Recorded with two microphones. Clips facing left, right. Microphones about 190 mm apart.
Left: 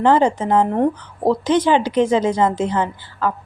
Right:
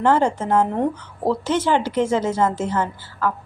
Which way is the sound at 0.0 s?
15° left (ahead or behind).